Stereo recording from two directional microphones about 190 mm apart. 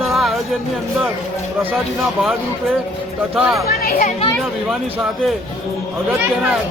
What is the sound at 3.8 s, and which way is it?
Speech, 50° left (ahead or behind).